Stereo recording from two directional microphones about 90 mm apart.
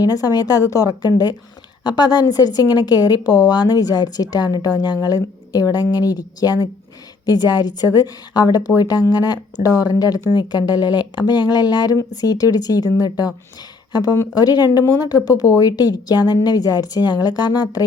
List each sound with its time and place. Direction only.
0.0 s a woman's voice: 45° left (ahead or behind)